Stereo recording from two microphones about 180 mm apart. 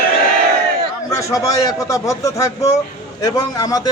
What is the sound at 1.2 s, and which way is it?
A man's voice, 15° left (ahead or behind).